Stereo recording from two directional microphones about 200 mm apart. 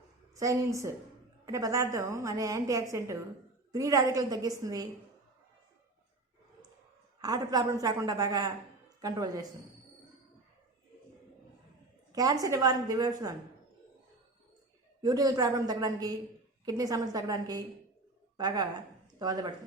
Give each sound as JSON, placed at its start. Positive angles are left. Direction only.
{"t": 0.3, "sound": "a woman's voice", "side_deg": -15}
{"t": 7.2, "sound": "a woman's voice", "side_deg": -20}
{"t": 12.1, "sound": "a woman's voice", "side_deg": -20}
{"t": 15.0, "sound": "a woman's voice", "side_deg": -20}